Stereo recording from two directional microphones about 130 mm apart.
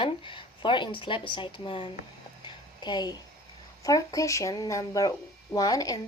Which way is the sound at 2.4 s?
35° left (ahead or behind).